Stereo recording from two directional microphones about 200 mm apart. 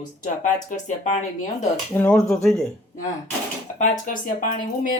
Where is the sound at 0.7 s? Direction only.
40° left (ahead or behind).